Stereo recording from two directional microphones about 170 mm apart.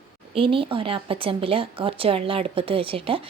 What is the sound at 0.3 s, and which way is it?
A woman's voice, 30° right (ahead or behind).